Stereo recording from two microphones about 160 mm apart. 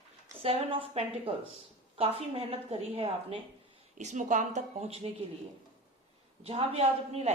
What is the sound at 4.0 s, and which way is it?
Speech, 50° right (ahead or behind).